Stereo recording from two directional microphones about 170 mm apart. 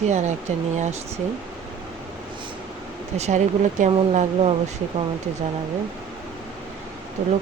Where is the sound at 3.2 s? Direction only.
45° right (ahead or behind).